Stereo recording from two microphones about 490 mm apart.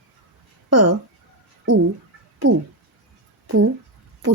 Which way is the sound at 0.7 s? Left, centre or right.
Right.